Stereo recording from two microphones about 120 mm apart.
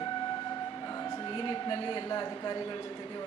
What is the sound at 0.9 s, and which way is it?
A woman's voice, 35° left (ahead or behind).